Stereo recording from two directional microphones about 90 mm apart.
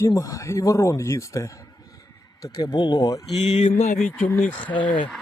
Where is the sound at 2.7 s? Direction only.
50° left (ahead or behind).